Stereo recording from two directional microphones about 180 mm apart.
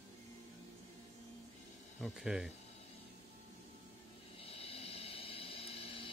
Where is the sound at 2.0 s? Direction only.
Centre (ahead or behind).